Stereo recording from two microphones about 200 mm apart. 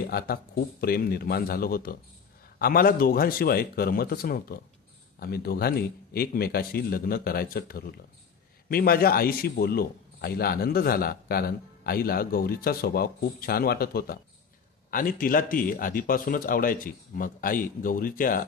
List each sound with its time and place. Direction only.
0.0 s a man's voice: 50° left (ahead or behind)